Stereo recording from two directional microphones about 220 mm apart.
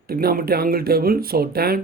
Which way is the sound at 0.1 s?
45° right (ahead or behind).